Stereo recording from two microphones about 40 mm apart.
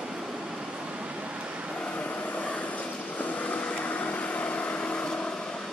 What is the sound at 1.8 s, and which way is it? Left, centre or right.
Vehicle, left.